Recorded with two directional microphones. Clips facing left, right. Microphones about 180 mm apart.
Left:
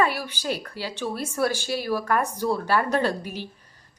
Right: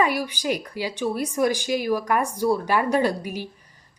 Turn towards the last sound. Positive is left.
turn(degrees=-10)  # may be behind; listen again after turning